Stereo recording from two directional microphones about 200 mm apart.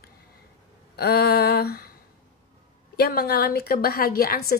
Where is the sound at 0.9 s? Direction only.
50° left (ahead or behind).